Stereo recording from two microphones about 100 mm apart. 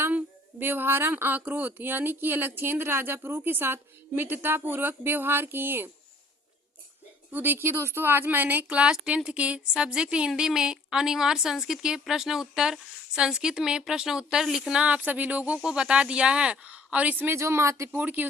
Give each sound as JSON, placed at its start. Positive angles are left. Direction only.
{"t": 0.0, "sound": "speech", "side_deg": -20}
{"t": 7.3, "sound": "speech", "side_deg": -20}